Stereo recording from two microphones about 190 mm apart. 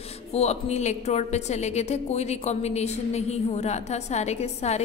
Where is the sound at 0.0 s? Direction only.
35° left (ahead or behind).